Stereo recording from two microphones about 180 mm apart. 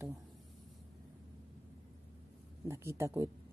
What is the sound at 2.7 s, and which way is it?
Speech, 15° right (ahead or behind).